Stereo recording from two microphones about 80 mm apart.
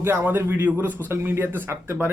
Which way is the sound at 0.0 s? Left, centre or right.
Right.